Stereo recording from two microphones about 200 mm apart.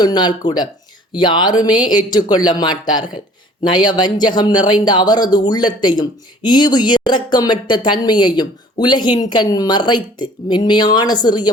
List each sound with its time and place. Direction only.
0.0 s speech: 20° left (ahead or behind)